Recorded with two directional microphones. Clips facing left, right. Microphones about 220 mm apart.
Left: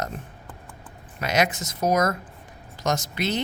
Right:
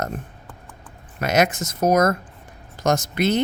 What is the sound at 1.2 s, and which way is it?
Speech, 50° right (ahead or behind).